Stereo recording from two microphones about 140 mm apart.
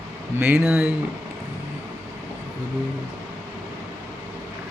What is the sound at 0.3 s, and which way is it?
Speech, 15° right (ahead or behind).